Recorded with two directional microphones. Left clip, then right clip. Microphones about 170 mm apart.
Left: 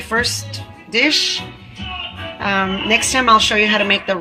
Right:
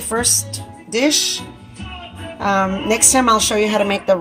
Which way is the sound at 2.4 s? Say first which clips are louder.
Right 1 dB; 75° right (ahead or behind).